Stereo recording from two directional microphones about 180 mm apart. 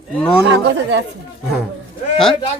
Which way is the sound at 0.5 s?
75° right (ahead or behind).